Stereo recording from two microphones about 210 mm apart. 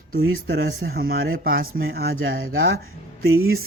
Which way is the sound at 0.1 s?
45° right (ahead or behind).